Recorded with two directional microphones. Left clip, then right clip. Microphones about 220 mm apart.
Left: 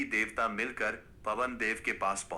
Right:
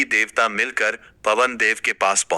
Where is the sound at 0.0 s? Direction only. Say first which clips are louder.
Right 13 dB; 45° right (ahead or behind).